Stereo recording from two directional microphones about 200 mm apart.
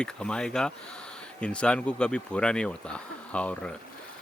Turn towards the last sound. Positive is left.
turn(degrees=5)  # may be behind; listen again after turning